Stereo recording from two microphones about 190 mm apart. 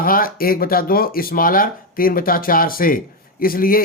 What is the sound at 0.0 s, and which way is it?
Speech, 50° left (ahead or behind).